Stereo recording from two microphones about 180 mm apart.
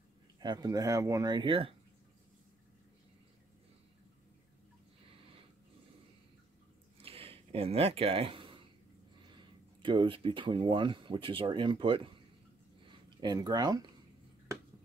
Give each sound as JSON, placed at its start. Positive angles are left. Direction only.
{"t": 0.4, "sound": "speech", "side_deg": -20}
{"t": 7.0, "sound": "a sound", "side_deg": -30}
{"t": 9.4, "sound": "speech", "side_deg": -25}